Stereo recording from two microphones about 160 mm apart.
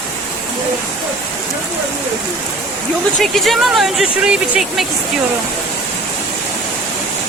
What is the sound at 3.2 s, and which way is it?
Speech, centre (ahead or behind).